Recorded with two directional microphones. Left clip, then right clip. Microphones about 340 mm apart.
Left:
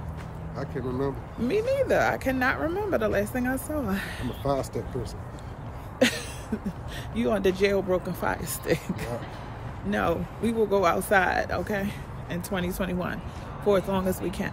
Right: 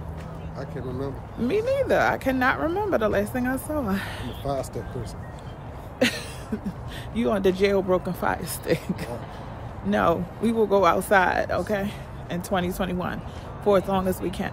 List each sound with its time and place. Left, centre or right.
0.6 s speech: left
1.4 s speech: centre
4.5 s speech: left
5.9 s a sound: centre
7.2 s speech: centre